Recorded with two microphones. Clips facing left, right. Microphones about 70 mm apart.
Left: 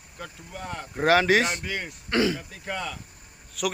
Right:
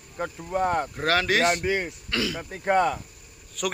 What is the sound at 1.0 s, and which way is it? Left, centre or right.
Speech, centre.